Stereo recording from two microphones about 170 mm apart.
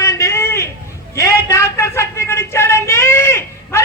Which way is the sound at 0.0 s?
20° left (ahead or behind).